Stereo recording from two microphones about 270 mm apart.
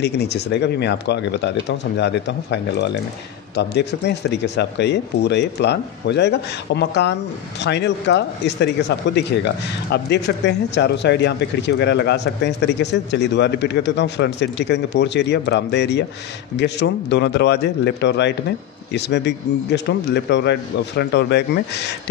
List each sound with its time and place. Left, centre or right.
0.0 s speech: left